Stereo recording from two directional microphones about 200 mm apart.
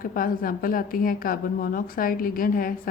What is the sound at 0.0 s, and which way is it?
A woman's voice, 45° left (ahead or behind).